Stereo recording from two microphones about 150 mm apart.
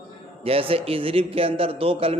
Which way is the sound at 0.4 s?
40° right (ahead or behind).